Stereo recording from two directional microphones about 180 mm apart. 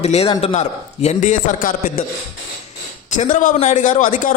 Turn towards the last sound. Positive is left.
turn(degrees=45)  # may be behind; listen again after turning